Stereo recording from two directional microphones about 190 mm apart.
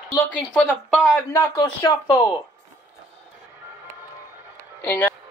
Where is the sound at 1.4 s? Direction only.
20° left (ahead or behind).